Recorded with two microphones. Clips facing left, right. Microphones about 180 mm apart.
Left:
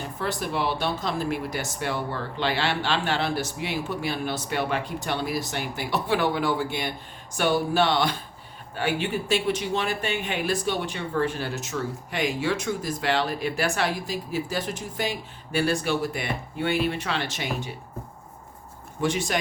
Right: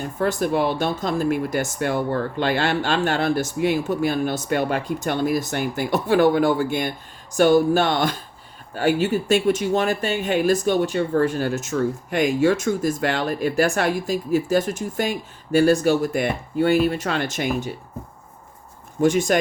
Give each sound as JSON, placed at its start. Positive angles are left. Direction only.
{"t": 0.0, "sound": "speech", "side_deg": -50}
{"t": 19.0, "sound": "speech", "side_deg": -45}